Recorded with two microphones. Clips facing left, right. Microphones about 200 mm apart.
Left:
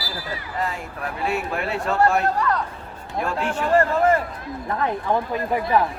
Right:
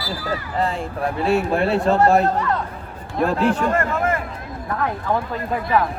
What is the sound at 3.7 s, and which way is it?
Speech, 35° left (ahead or behind).